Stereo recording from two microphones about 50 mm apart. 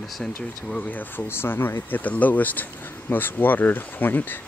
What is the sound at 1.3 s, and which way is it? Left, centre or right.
Speech, left.